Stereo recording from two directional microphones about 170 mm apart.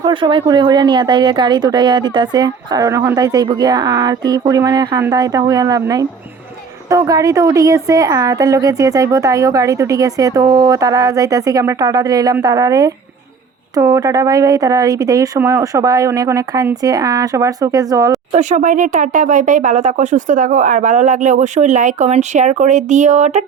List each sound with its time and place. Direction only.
0.0 s a woman's voice: 30° right (ahead or behind)
18.3 s speech: 45° right (ahead or behind)